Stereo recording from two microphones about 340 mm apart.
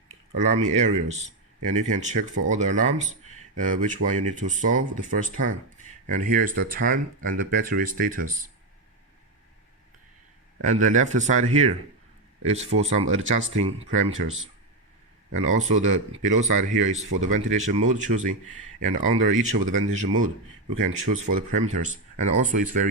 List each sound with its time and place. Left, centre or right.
0.3 s speech: centre
10.7 s speech: right